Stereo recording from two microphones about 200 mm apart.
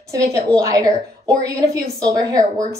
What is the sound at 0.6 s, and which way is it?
A woman's voice, 15° right (ahead or behind).